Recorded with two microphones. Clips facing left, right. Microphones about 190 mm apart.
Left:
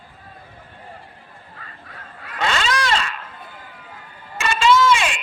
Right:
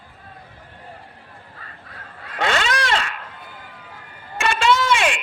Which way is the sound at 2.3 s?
55° right (ahead or behind).